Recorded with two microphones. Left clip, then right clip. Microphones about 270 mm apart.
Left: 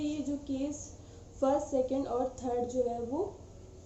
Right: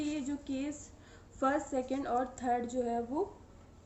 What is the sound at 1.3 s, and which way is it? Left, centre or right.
A woman's voice, right.